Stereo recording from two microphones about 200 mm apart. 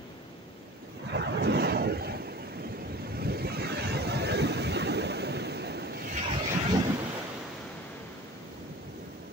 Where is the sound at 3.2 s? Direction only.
50° right (ahead or behind).